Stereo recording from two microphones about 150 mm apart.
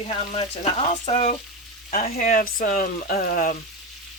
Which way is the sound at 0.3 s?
40° left (ahead or behind).